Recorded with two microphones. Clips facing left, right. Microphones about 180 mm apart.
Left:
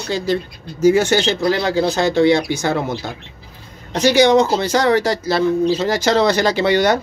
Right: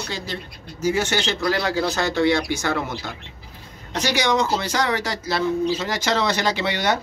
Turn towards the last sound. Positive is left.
turn(degrees=40)  # may be behind; listen again after turning